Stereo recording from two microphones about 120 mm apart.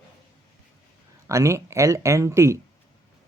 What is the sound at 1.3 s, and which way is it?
Speech, 25° right (ahead or behind).